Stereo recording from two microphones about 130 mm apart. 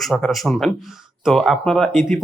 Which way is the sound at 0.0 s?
Centre (ahead or behind).